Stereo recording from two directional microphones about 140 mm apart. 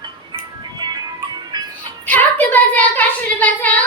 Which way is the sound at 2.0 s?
10° left (ahead or behind).